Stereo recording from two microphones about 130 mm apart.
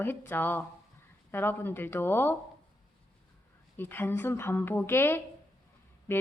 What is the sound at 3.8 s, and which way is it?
Speech, 15° left (ahead or behind).